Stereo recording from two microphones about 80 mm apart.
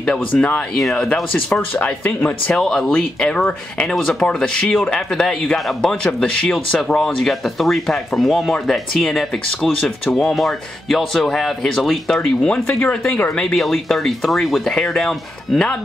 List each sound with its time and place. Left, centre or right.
0.4 s speech: centre
2.5 s speech: centre
12.4 s speech: centre